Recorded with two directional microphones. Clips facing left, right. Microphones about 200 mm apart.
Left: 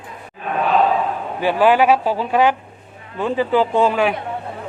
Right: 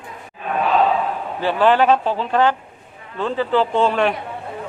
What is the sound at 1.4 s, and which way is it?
Speech, 10° left (ahead or behind).